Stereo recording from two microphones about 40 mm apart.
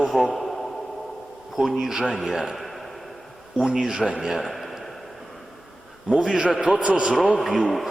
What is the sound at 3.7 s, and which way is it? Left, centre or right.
A man's voice, centre.